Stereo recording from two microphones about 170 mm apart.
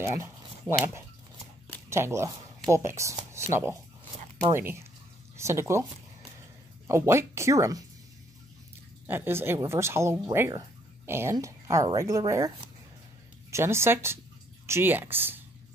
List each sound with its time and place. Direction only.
0.0 s speech: 15° right (ahead or behind)
6.9 s speech: 15° right (ahead or behind)
9.0 s speech: 15° right (ahead or behind)